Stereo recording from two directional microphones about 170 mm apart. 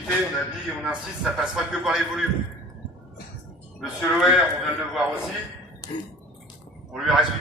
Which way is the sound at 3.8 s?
Centre (ahead or behind).